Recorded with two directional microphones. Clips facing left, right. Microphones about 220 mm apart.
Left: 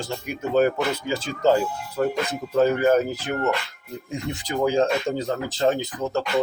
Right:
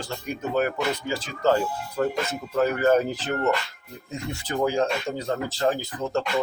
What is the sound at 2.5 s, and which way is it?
Speech, 25° left (ahead or behind).